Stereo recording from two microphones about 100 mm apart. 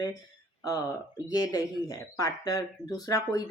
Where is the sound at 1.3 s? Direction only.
40° left (ahead or behind).